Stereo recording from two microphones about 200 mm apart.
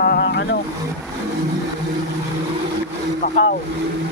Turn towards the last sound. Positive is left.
turn(degrees=45)  # may be behind; listen again after turning